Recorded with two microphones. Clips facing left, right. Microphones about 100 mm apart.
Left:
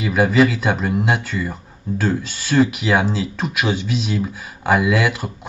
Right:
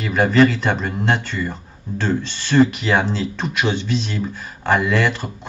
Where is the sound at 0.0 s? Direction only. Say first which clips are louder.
Even; 5° left (ahead or behind).